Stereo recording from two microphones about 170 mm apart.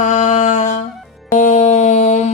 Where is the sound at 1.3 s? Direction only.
45° left (ahead or behind).